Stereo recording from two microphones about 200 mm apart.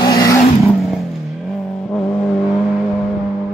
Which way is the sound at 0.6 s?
Centre (ahead or behind).